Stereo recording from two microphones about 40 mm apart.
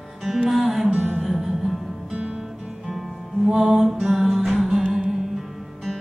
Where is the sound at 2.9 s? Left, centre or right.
Centre.